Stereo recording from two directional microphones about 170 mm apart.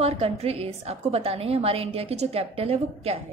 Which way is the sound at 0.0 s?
35° right (ahead or behind).